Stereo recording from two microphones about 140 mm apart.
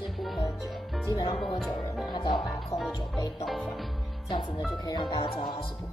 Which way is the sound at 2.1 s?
35° left (ahead or behind).